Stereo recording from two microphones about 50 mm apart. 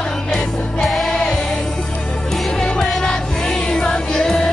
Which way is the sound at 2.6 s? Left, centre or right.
Centre.